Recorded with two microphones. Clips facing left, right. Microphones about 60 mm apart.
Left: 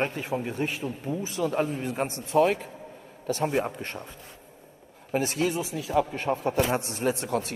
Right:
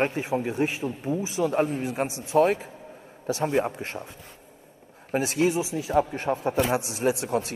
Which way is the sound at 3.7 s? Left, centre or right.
Centre.